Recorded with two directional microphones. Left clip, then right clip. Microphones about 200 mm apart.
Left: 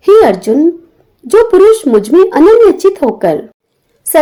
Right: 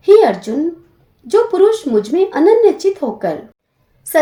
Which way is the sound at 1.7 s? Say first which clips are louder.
Left 8 dB; 40° left (ahead or behind).